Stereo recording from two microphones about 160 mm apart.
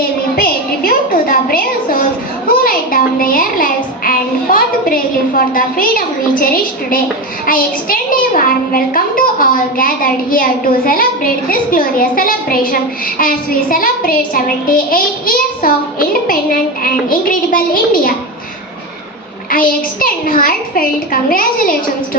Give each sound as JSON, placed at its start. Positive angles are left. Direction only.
{"t": 0.3, "sound": "a sound", "side_deg": 65}
{"t": 2.6, "sound": "a child's voice", "side_deg": 60}
{"t": 19.5, "sound": "a child's voice", "side_deg": 60}